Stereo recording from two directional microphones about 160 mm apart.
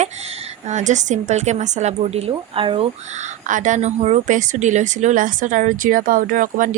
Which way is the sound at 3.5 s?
55° right (ahead or behind).